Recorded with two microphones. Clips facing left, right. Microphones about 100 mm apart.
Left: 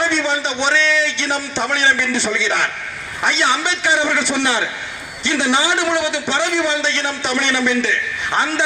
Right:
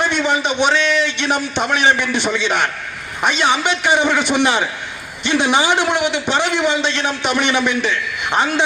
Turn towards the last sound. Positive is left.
turn(degrees=-15)  # may be behind; listen again after turning